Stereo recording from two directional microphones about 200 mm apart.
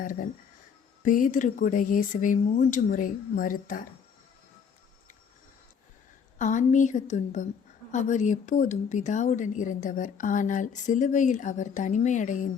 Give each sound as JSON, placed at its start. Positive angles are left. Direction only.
{"t": 0.0, "sound": "speech", "side_deg": 45}
{"t": 6.4, "sound": "speech", "side_deg": 40}